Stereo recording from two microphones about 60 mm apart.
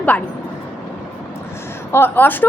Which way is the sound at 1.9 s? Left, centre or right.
Left.